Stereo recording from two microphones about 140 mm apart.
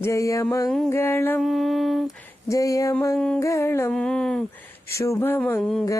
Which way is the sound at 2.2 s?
25° left (ahead or behind).